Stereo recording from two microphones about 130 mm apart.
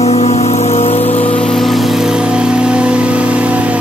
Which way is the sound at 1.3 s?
5° left (ahead or behind).